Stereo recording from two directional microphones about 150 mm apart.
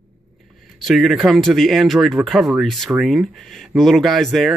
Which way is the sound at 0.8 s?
Centre (ahead or behind).